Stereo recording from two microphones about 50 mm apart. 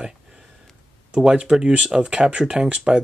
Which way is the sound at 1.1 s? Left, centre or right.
Centre.